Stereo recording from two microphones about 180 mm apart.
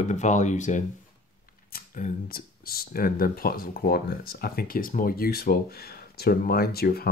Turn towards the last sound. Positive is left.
turn(degrees=60)  # may be behind; listen again after turning